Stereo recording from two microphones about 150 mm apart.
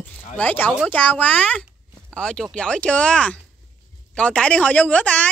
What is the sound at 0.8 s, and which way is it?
Speech, 10° left (ahead or behind).